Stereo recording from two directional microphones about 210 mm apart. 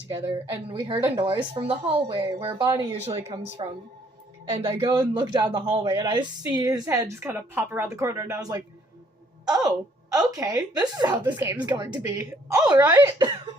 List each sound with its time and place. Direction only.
0.7 s speech: 25° right (ahead or behind)
4.8 s a woman's voice: 20° right (ahead or behind)